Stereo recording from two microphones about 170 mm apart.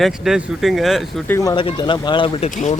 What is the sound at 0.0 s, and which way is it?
Speech, centre (ahead or behind).